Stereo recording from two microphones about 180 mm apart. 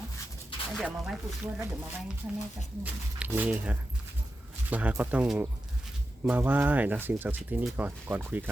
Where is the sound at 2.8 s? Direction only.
10° right (ahead or behind).